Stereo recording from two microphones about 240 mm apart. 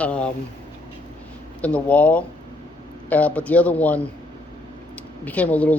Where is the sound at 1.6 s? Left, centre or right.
Centre.